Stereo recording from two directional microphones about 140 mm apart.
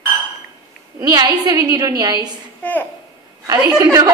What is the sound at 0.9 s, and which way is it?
A woman's voice, 30° right (ahead or behind).